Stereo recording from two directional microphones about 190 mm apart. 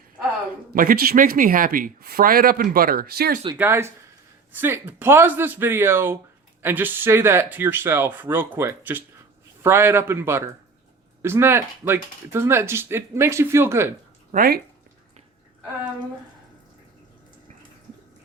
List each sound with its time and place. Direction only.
0.7 s speech: 50° right (ahead or behind)
3.5 s speech: 15° right (ahead or behind)
14.3 s speech: 50° right (ahead or behind)